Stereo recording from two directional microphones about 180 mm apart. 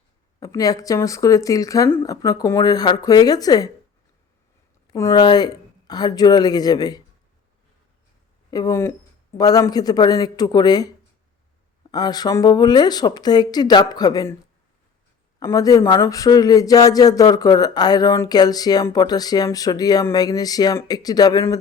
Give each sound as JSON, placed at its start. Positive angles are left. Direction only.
{"t": 0.3, "sound": "speech", "side_deg": 20}
{"t": 4.9, "sound": "speech", "side_deg": 20}
{"t": 8.4, "sound": "speech", "side_deg": 20}
{"t": 15.4, "sound": "speech", "side_deg": 20}